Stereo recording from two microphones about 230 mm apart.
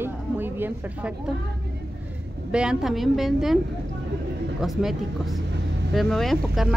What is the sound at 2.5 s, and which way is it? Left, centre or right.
Speech, centre.